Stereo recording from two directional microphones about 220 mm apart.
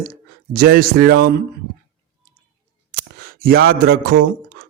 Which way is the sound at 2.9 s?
45° right (ahead or behind).